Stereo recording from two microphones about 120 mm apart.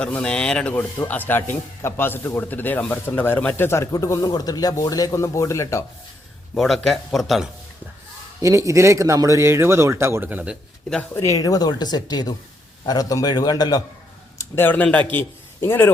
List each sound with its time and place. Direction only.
0.0 s speech: 10° left (ahead or behind); by 5.8 s 25° left (ahead or behind)
6.5 s speech: centre (ahead or behind)
8.4 s speech: 25° right (ahead or behind)
11.1 s speech: 25° left (ahead or behind)
14.3 s speech: 20° left (ahead or behind)